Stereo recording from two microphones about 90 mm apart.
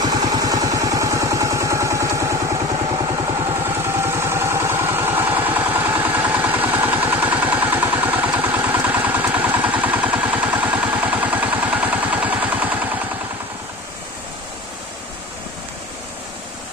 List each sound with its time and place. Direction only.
0.0 s vehicle: 50° right (ahead or behind)
3.8 s vehicle: 30° right (ahead or behind)